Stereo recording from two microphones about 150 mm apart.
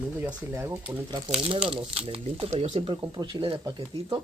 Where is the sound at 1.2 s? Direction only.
35° right (ahead or behind).